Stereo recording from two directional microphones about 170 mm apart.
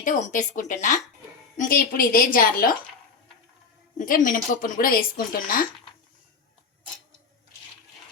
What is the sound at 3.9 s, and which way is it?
A woman's voice, 50° left (ahead or behind).